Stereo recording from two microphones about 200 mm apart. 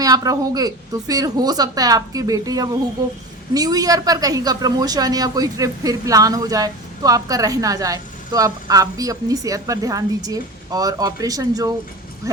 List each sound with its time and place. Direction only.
0.0 s a woman's voice: 20° right (ahead or behind)